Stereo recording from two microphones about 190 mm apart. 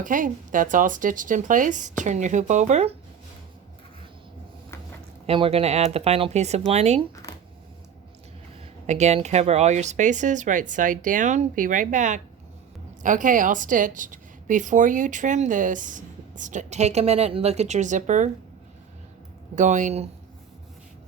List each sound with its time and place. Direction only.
0.0 s speech: 45° right (ahead or behind)
5.2 s a woman's voice: 30° right (ahead or behind)
8.9 s a woman's voice: 35° right (ahead or behind)
19.5 s a woman's voice: 40° right (ahead or behind)